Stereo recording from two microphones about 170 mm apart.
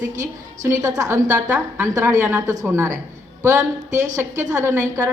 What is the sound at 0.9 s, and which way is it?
A woman's voice, 20° right (ahead or behind).